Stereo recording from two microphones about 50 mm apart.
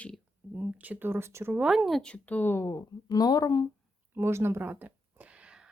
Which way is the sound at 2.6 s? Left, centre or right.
Left.